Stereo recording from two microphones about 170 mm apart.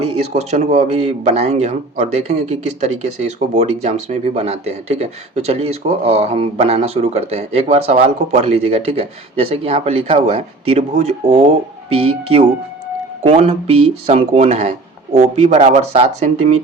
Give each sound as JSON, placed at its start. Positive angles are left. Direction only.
{"t": 0.0, "sound": "speech", "side_deg": -40}